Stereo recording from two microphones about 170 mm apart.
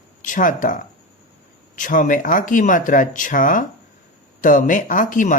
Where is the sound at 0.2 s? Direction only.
50° left (ahead or behind).